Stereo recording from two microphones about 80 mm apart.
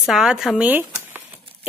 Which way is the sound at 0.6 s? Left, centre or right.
Right.